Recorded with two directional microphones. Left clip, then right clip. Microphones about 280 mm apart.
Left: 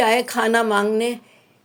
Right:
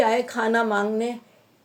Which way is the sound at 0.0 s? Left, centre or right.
Left.